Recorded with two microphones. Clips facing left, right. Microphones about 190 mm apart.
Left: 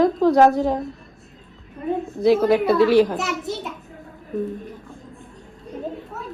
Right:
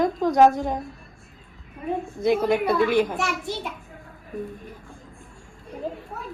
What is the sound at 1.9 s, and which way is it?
A child's voice, centre (ahead or behind).